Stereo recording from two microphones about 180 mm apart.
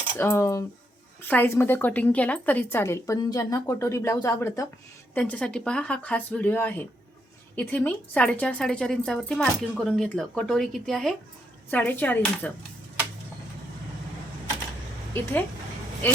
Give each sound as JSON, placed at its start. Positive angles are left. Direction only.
{"t": 0.2, "sound": "a woman's voice", "side_deg": 15}
{"t": 15.1, "sound": "a woman's voice", "side_deg": 10}